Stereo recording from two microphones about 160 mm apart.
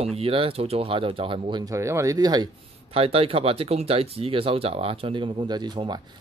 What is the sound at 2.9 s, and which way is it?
Speech, 35° right (ahead or behind).